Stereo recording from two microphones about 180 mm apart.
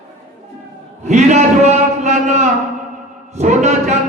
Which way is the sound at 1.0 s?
40° right (ahead or behind).